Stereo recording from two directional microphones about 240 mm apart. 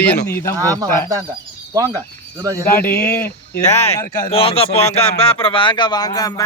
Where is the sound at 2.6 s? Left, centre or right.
Centre.